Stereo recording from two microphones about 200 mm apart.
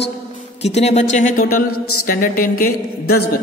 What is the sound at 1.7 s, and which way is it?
Speech, 90° left.